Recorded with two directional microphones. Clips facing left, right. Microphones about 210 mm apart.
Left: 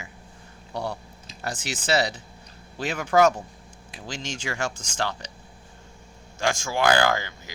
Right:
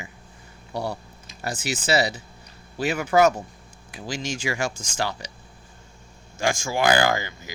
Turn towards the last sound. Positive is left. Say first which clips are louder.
# right 1 dB
turn(degrees=-10)  # may be behind; listen again after turning